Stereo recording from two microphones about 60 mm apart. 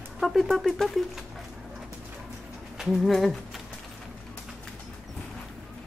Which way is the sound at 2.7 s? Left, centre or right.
Centre.